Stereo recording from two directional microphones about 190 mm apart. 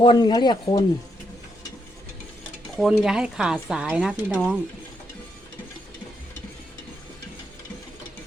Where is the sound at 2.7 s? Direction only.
5° right (ahead or behind).